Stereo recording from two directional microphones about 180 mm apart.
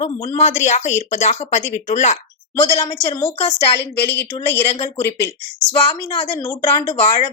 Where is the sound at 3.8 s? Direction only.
70° left (ahead or behind).